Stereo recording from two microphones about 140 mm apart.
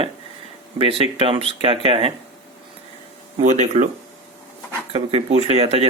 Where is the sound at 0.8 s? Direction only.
40° right (ahead or behind).